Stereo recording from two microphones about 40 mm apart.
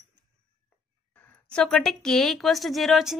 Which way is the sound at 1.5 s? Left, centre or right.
Left.